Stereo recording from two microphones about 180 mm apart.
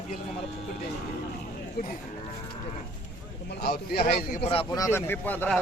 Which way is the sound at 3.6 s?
60° left (ahead or behind).